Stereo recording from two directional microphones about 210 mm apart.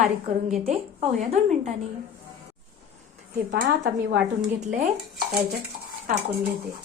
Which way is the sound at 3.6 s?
40° right (ahead or behind).